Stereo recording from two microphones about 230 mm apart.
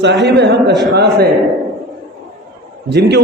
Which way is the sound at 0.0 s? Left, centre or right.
Right.